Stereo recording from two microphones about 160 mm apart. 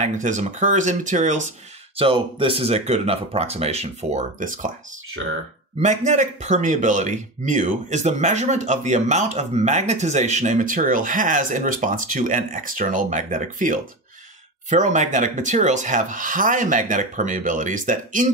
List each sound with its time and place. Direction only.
0.0 s speech: 50° right (ahead or behind)
2.0 s speech: 35° right (ahead or behind); by 4.7 s 55° right (ahead or behind)
5.8 s speech: 45° right (ahead or behind)